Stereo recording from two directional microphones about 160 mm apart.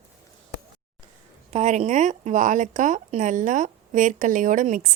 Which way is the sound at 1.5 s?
45° right (ahead or behind).